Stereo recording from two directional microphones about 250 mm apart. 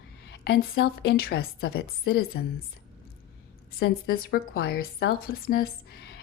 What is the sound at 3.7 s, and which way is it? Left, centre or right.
A woman's voice, left.